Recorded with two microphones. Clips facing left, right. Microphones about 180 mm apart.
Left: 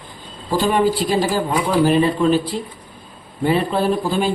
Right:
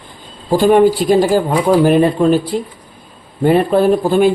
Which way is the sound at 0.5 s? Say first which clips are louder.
Right 7 dB; 50° right (ahead or behind).